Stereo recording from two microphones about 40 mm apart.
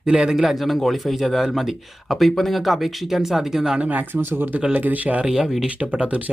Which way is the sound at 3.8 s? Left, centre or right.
Right.